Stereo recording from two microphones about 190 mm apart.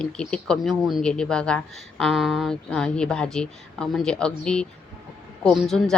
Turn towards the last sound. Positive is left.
turn(degrees=0)  # may be behind; listen again after turning